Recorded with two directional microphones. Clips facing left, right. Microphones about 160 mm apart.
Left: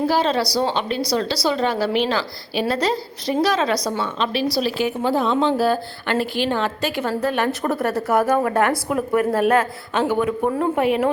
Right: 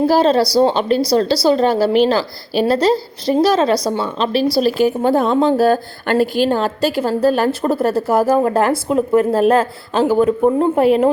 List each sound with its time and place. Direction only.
0.1 s a woman's voice: 40° right (ahead or behind)